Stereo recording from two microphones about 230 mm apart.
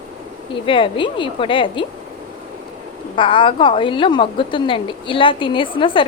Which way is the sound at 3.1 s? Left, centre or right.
Left.